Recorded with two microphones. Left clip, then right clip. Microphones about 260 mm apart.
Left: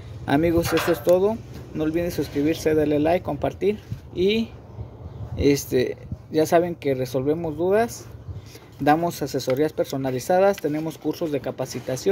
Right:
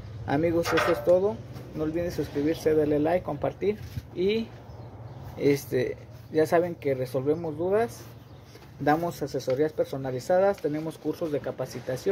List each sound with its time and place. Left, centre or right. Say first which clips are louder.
0.2 s speech: left 5 dB; left
1.8 s speech: left 5 dB; left